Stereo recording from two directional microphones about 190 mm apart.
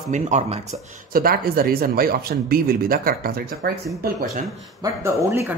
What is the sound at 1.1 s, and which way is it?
Speech, 50° right (ahead or behind).